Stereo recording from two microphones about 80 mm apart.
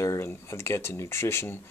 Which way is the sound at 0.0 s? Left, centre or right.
Left.